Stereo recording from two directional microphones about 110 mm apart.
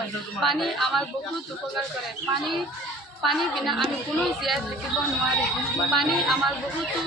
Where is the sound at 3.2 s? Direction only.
Centre (ahead or behind).